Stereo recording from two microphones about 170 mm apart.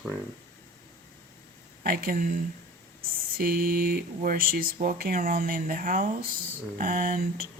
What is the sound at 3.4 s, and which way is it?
A woman's voice, 60° right (ahead or behind).